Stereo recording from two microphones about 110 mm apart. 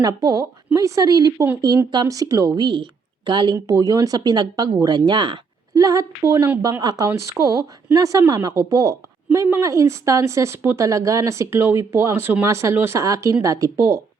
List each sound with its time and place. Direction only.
0.0 s speech: 35° right (ahead or behind)
3.5 s speech: 30° right (ahead or behind)
5.7 s a woman's voice: 30° right (ahead or behind)